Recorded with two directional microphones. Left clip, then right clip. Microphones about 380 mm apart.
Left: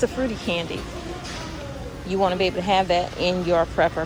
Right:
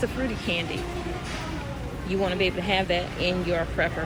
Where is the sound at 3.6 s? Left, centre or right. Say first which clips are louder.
Left 6 dB; left.